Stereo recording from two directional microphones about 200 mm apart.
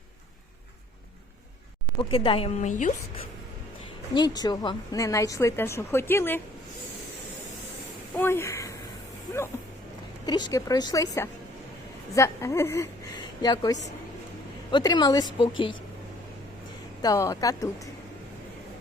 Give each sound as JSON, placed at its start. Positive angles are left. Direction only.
{"t": 2.0, "sound": "a woman's voice", "side_deg": 25}
{"t": 4.1, "sound": "a woman's voice", "side_deg": 20}
{"t": 8.1, "sound": "a sound", "side_deg": 10}
{"t": 10.2, "sound": "a woman's voice", "side_deg": 20}
{"t": 17.0, "sound": "a woman's voice", "side_deg": 15}